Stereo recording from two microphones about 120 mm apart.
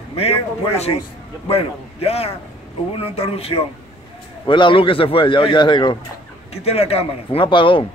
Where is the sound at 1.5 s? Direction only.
55° left (ahead or behind).